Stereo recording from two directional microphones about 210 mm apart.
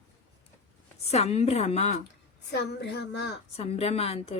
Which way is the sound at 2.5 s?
55° left (ahead or behind).